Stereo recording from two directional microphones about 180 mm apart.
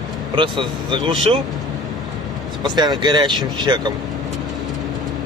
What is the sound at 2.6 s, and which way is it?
Speech, 25° right (ahead or behind).